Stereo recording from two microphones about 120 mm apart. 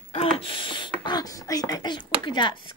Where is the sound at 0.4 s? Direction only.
45° left (ahead or behind).